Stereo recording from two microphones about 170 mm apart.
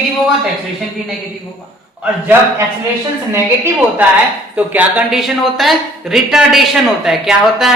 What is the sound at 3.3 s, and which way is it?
A woman's voice, 15° right (ahead or behind).